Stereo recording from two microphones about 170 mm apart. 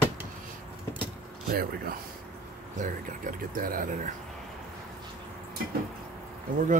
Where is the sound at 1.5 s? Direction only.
60° right (ahead or behind).